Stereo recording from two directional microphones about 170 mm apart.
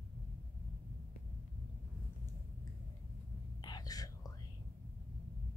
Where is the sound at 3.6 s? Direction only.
25° left (ahead or behind).